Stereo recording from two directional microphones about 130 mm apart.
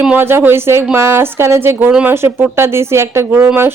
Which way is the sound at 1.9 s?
10° right (ahead or behind).